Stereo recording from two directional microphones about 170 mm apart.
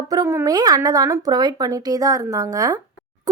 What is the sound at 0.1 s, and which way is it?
A woman's voice, 20° right (ahead or behind).